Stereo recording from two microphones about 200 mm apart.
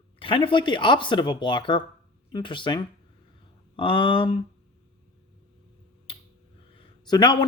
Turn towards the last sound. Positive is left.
turn(degrees=20)  # may be behind; listen again after turning